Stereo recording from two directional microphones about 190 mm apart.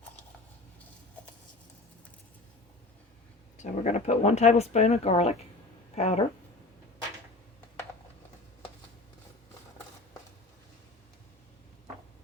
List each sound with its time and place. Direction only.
3.6 s speech: 40° left (ahead or behind)